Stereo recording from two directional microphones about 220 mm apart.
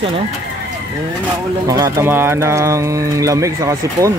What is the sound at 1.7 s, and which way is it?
Speech, 15° right (ahead or behind).